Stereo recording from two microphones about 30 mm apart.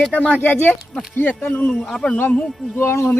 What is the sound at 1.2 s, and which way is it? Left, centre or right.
Speech, left.